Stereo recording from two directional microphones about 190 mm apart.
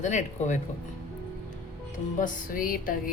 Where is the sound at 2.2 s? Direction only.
50° left (ahead or behind).